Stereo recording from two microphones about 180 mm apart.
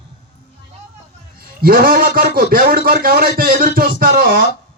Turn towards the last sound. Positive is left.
turn(degrees=-55)  # may be behind; listen again after turning